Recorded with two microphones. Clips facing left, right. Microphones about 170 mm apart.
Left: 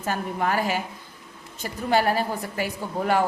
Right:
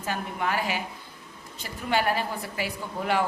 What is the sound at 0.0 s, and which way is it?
A woman's voice, 45° left (ahead or behind).